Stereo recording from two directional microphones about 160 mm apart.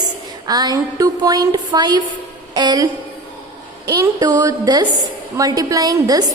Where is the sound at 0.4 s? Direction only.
25° right (ahead or behind).